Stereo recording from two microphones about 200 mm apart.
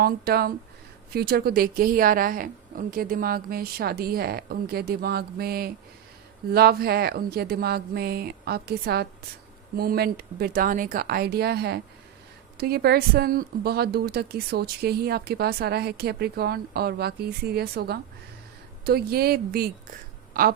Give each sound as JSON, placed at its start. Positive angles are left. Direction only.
{"t": 0.0, "sound": "a woman's voice", "side_deg": -50}